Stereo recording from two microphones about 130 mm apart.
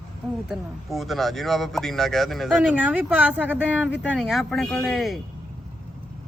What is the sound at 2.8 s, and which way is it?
Speech, 15° right (ahead or behind).